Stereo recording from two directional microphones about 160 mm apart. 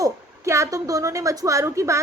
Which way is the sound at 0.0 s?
20° right (ahead or behind).